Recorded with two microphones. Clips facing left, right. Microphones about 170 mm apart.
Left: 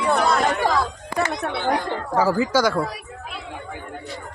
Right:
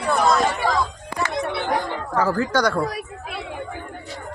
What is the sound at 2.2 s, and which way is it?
Speech, 10° left (ahead or behind).